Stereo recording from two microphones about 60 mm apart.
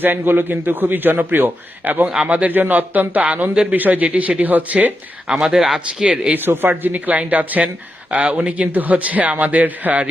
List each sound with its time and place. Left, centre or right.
0.0 s a man's voice: right
2.0 s speech: centre
2.5 s a man's voice: right
5.3 s speech: centre
6.3 s a man's voice: right